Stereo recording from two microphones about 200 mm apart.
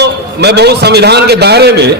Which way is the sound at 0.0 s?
55° right (ahead or behind).